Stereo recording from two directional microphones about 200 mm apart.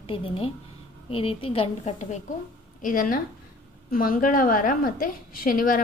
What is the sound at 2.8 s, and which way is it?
A woman's voice, 45° left (ahead or behind).